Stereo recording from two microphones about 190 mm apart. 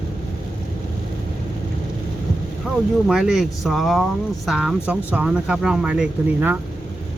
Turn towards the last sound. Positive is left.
turn(degrees=-5)  # may be behind; listen again after turning